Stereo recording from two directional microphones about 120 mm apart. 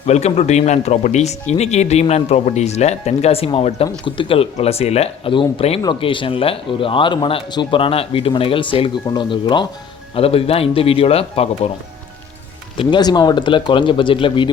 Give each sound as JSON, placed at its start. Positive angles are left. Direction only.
{"t": 0.0, "sound": "speech", "side_deg": 65}
{"t": 10.2, "sound": "speech", "side_deg": 50}
{"t": 12.7, "sound": "speech", "side_deg": 45}